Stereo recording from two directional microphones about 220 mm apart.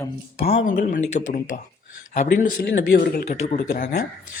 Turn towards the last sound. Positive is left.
turn(degrees=40)  # may be behind; listen again after turning